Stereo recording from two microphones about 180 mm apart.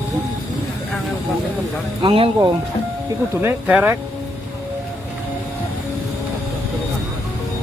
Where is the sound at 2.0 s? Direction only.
30° right (ahead or behind).